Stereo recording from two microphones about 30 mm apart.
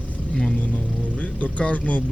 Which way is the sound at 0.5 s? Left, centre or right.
Left.